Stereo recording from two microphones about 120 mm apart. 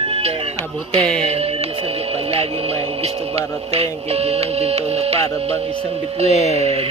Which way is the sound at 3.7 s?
60° right (ahead or behind).